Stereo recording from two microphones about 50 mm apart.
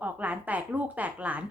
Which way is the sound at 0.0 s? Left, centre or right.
Right.